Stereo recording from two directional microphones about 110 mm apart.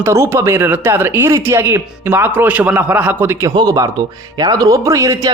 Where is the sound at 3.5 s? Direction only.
35° right (ahead or behind).